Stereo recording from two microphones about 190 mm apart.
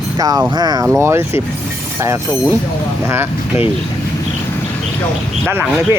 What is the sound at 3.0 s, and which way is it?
Speech, 10° right (ahead or behind).